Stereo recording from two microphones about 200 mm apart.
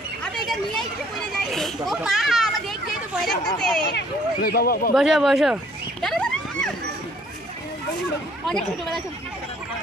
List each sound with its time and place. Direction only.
0.2 s a sound: 5° left (ahead or behind)
1.4 s a child's voice: centre (ahead or behind)
3.9 s speech: 50° left (ahead or behind)
4.9 s speech: 5° right (ahead or behind)
6.0 s a sound: 5° left (ahead or behind)
8.5 s speech: 5° left (ahead or behind)